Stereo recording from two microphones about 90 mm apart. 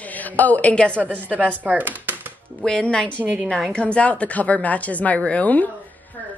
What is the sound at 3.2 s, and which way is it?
Speech, 15° right (ahead or behind).